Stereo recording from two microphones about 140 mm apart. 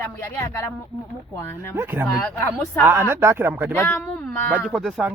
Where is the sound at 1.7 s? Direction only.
15° right (ahead or behind).